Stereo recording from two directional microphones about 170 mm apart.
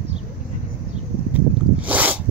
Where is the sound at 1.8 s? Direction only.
10° right (ahead or behind).